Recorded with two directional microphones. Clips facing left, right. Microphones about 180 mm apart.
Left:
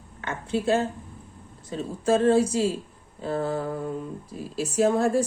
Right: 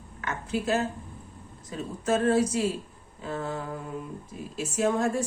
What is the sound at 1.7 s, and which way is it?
A woman's voice, 30° left (ahead or behind).